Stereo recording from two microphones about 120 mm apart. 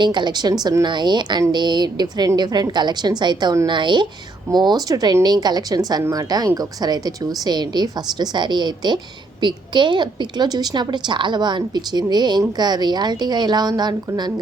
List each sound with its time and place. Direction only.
0.0 s a woman's voice: 40° right (ahead or behind)
6.0 s a woman's voice: 20° right (ahead or behind)